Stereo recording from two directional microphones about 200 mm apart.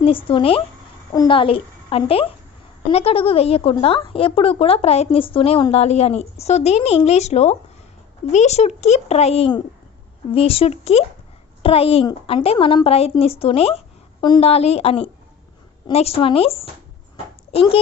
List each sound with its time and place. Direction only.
0.0 s a woman's voice: 25° left (ahead or behind)